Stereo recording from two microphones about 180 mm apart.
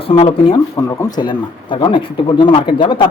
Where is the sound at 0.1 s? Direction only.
30° left (ahead or behind).